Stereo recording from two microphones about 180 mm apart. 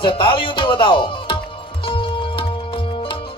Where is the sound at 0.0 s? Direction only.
25° left (ahead or behind).